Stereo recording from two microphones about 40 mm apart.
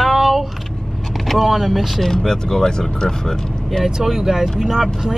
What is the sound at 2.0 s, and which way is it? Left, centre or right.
Speech, centre.